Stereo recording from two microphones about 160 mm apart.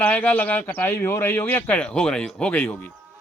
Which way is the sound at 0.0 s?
10° left (ahead or behind).